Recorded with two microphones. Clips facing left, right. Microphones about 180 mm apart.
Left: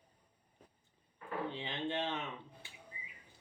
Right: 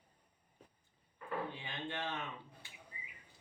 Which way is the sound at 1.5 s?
20° left (ahead or behind).